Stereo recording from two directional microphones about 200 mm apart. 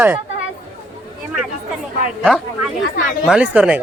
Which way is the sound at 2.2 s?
5° right (ahead or behind).